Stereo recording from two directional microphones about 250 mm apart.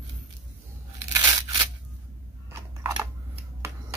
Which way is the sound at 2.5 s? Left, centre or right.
Centre.